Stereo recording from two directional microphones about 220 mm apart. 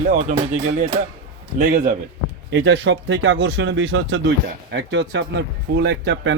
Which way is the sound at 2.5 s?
55° right (ahead or behind).